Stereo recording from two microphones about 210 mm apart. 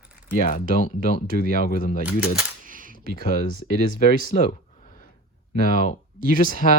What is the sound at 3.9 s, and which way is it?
Speech, 40° left (ahead or behind).